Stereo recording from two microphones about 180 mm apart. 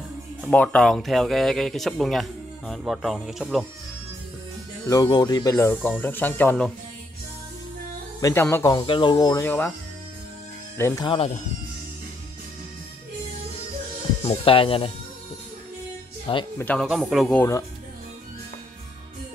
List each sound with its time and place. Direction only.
0.4 s speech: 5° left (ahead or behind)
4.8 s speech: 20° left (ahead or behind)
8.2 s speech: 15° left (ahead or behind)
8.8 s speech: 25° left (ahead or behind)
9.5 s speech: 10° left (ahead or behind)
10.8 s speech: 20° left (ahead or behind)
11.1 s speech: 40° left (ahead or behind)
14.2 s speech: 30° left (ahead or behind)
16.5 s speech: 10° left (ahead or behind)
16.8 s speech: centre (ahead or behind)
17.4 s speech: 15° left (ahead or behind)